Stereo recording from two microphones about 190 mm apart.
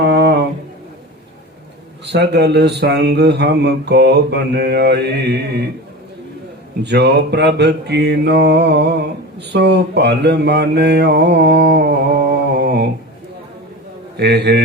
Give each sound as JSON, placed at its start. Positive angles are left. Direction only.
{"t": 0.0, "sound": "a sound", "side_deg": -65}
{"t": 2.0, "sound": "speech", "side_deg": -65}
{"t": 6.8, "sound": "speech", "side_deg": -60}
{"t": 9.5, "sound": "mantra", "side_deg": -65}
{"t": 14.2, "sound": "speech", "side_deg": -60}